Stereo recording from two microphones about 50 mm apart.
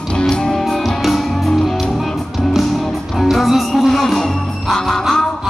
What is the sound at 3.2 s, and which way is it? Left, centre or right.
Music, centre.